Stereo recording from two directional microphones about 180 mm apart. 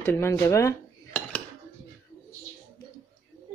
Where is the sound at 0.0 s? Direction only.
15° left (ahead or behind).